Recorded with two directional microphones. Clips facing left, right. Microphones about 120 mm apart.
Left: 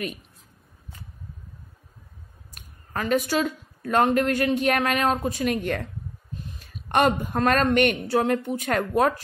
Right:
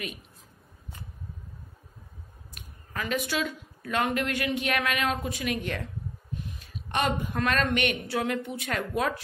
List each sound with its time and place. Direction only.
2.5 s a woman's voice: 40° left (ahead or behind)